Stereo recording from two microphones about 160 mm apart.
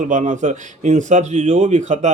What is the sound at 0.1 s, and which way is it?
Speech, 50° right (ahead or behind).